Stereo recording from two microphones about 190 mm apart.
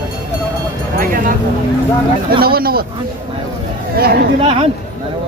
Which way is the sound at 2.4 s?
55° right (ahead or behind).